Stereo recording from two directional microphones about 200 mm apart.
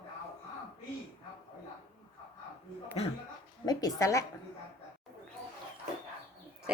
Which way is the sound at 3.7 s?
20° left (ahead or behind).